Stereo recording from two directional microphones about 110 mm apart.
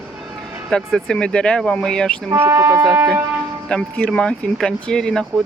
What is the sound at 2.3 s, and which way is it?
Speech, 25° right (ahead or behind).